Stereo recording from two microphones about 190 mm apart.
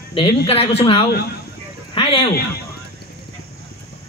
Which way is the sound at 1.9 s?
30° left (ahead or behind).